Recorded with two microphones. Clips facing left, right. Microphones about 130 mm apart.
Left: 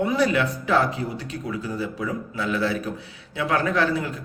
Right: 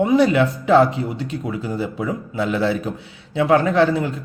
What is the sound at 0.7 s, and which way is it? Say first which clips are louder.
Speech: right 8 dB; 25° right (ahead or behind).